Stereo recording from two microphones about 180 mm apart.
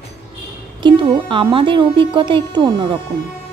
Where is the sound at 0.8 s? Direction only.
25° right (ahead or behind).